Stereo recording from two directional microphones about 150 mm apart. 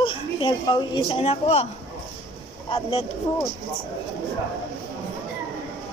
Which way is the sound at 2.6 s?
35° left (ahead or behind).